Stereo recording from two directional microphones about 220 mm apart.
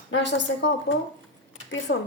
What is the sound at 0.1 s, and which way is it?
Speech, 55° left (ahead or behind).